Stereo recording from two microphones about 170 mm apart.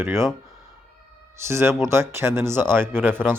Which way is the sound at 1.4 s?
15° right (ahead or behind).